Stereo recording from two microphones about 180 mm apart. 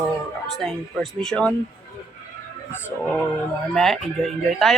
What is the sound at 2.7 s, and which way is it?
Speech, 10° left (ahead or behind).